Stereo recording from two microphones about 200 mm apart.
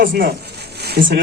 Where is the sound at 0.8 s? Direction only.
55° right (ahead or behind).